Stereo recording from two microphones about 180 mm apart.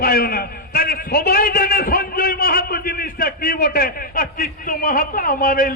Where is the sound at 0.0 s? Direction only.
55° left (ahead or behind).